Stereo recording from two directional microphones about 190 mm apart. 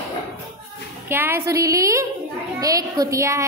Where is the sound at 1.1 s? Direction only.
10° right (ahead or behind).